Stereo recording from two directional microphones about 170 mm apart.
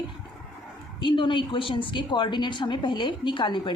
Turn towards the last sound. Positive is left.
turn(degrees=30)  # may be behind; listen again after turning